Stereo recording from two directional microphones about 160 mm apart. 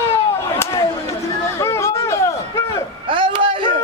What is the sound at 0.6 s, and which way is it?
Chop, 20° left (ahead or behind).